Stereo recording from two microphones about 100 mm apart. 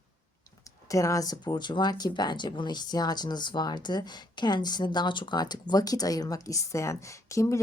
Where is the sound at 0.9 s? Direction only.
35° left (ahead or behind).